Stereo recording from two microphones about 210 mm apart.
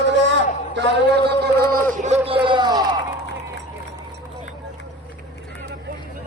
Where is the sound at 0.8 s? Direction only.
55° right (ahead or behind).